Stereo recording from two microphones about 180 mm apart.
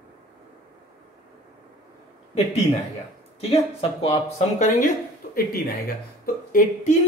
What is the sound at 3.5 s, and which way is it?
Speech, 30° left (ahead or behind).